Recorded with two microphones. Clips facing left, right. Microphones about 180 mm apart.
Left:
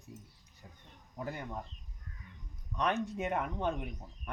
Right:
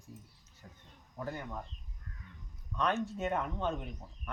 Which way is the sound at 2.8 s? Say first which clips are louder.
Even; 15° left (ahead or behind).